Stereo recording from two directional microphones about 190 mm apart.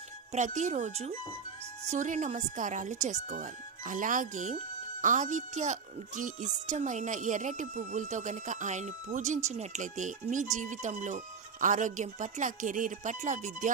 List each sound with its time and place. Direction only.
0.3 s speech: 40° right (ahead or behind)